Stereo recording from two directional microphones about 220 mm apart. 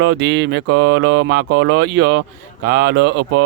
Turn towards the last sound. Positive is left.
turn(degrees=-50)  # may be behind; listen again after turning